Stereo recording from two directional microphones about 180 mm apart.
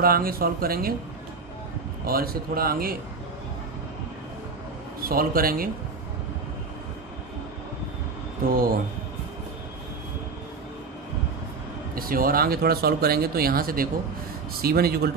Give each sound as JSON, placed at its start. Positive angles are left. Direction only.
{"t": 0.0, "sound": "speech", "side_deg": -55}
{"t": 2.0, "sound": "speech", "side_deg": -55}
{"t": 5.0, "sound": "speech", "side_deg": -55}
{"t": 8.5, "sound": "speech", "side_deg": -55}
{"t": 11.9, "sound": "speech", "side_deg": -55}